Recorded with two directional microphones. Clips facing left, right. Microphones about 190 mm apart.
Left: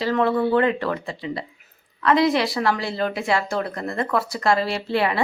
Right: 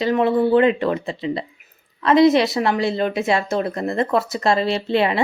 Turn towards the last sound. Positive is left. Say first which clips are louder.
# right 3 dB
turn(degrees=-20)  # may be behind; listen again after turning